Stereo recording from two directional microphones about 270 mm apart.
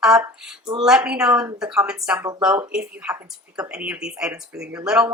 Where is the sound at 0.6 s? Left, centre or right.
Centre.